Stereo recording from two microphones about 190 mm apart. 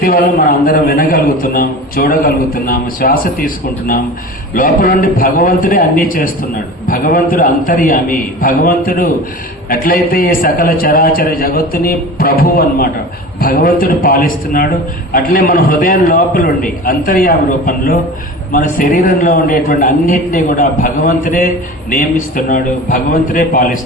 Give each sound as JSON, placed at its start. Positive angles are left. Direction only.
{"t": 0.0, "sound": "a man's voice", "side_deg": 50}